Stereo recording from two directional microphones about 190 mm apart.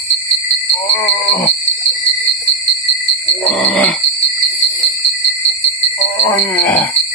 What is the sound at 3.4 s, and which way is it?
Grunt, 5° left (ahead or behind).